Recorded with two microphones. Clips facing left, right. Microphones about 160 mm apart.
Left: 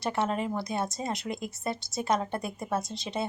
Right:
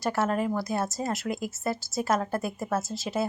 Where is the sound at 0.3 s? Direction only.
25° left (ahead or behind).